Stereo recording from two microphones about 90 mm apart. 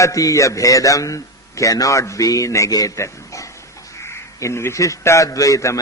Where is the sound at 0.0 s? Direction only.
40° left (ahead or behind).